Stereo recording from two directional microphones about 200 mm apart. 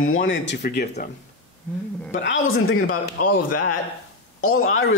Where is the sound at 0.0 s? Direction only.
85° left; by 0.8 s 55° left (ahead or behind).